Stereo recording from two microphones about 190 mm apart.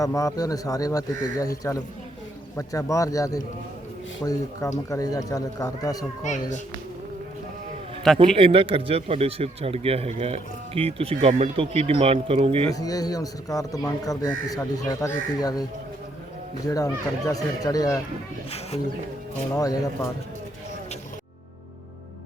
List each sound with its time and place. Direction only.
0.0 s a man's voice: 15° left (ahead or behind)
6.2 s speech: 40° left (ahead or behind)
8.1 s a man's voice: centre (ahead or behind)
8.4 s speech: 30° right (ahead or behind)
12.7 s speech: 20° left (ahead or behind)
16.6 s speech: 20° left (ahead or behind)
19.5 s speech: 20° left (ahead or behind)